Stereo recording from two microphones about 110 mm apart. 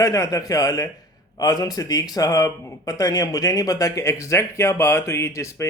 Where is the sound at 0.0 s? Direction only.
30° left (ahead or behind).